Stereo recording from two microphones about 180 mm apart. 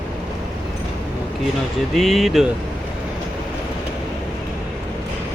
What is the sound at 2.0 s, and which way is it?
Speech, centre (ahead or behind).